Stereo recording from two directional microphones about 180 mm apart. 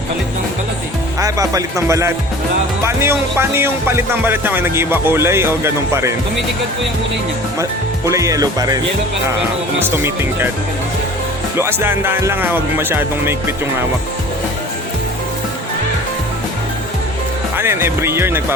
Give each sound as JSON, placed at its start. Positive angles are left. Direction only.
{"t": 1.2, "sound": "music", "side_deg": -20}
{"t": 7.6, "sound": "music", "side_deg": -20}
{"t": 9.8, "sound": "music", "side_deg": -10}
{"t": 11.5, "sound": "music", "side_deg": -15}
{"t": 17.6, "sound": "music", "side_deg": -15}